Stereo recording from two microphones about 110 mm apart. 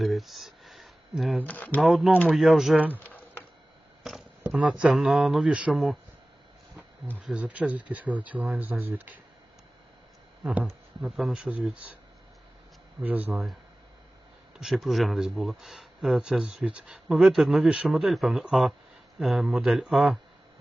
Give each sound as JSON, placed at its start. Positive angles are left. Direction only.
{"t": 0.0, "sound": "a sound", "side_deg": 0}
{"t": 1.4, "sound": "speech", "side_deg": 15}
{"t": 1.8, "sound": "speech", "side_deg": 0}
{"t": 2.8, "sound": "speech", "side_deg": -15}
{"t": 3.1, "sound": "a sound", "side_deg": 15}
{"t": 4.1, "sound": "a sound", "side_deg": -5}
{"t": 4.7, "sound": "speech", "side_deg": 0}
{"t": 7.2, "sound": "speech", "side_deg": -10}
{"t": 10.4, "sound": "speech", "side_deg": -10}
{"t": 13.0, "sound": "speech", "side_deg": -15}
{"t": 14.6, "sound": "speech", "side_deg": 0}